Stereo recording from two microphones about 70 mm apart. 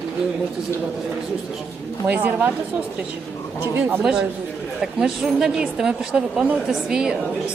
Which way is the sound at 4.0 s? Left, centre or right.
Centre.